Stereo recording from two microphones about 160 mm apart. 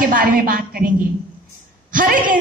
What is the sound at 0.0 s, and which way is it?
A woman's voice, 60° right (ahead or behind).